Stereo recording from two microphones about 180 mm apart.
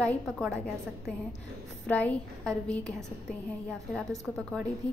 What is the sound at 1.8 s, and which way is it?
A woman's voice, 10° left (ahead or behind).